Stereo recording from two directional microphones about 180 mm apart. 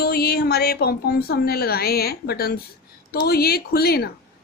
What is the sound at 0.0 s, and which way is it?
A woman's voice, 60° left (ahead or behind).